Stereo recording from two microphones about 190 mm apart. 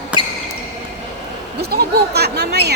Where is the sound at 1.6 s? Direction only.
60° right (ahead or behind).